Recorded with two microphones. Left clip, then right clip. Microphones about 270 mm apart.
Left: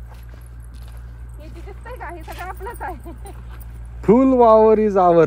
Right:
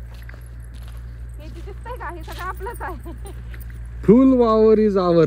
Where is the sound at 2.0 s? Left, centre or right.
Centre.